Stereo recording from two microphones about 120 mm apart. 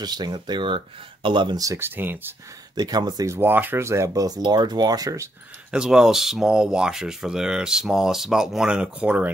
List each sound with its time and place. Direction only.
0.0 s speech: 35° right (ahead or behind); by 2.3 s 15° right (ahead or behind)
2.7 s speech: 35° right (ahead or behind)
3.3 s speech: 15° right (ahead or behind)
5.7 s speech: 5° right (ahead or behind)